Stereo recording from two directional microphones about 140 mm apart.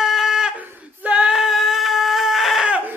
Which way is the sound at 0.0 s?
5° right (ahead or behind).